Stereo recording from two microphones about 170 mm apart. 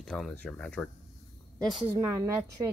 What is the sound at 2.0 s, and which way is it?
Speech, 15° right (ahead or behind).